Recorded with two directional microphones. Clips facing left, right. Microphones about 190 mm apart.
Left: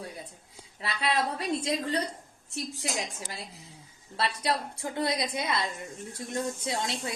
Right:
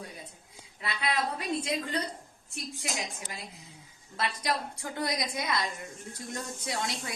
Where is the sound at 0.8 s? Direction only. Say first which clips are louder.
Left 2 dB; 30° left (ahead or behind).